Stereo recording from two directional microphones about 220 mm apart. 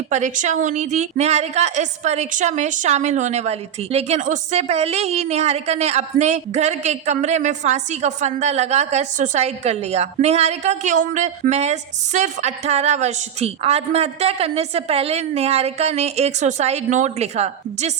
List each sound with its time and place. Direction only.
0.1 s a woman's voice: 35° right (ahead or behind)